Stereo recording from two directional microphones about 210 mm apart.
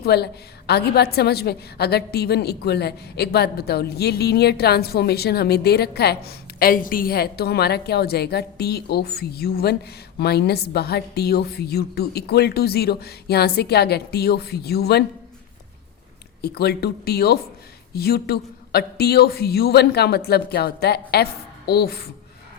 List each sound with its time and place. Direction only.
0.0 s a woman's voice: 50° left (ahead or behind)
16.4 s a woman's voice: 50° left (ahead or behind)